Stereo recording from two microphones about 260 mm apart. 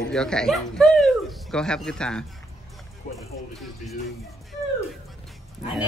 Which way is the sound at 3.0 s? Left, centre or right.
Left.